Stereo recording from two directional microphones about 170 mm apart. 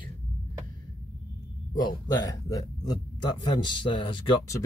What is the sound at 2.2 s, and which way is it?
Speech, 20° left (ahead or behind).